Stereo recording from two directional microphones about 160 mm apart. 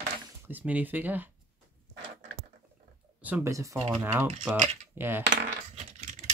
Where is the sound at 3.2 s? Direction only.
15° right (ahead or behind).